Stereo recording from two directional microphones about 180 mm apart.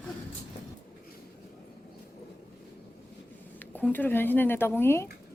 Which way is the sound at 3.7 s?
10° left (ahead or behind).